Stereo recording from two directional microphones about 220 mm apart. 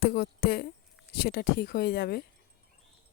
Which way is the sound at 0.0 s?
45° left (ahead or behind).